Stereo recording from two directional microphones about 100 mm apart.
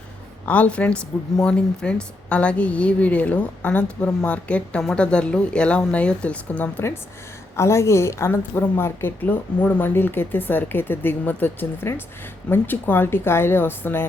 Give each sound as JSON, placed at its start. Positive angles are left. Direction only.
{"t": 0.4, "sound": "a woman's voice", "side_deg": 15}